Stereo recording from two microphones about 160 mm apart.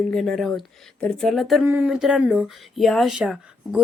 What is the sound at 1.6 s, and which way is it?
Speech, 10° right (ahead or behind).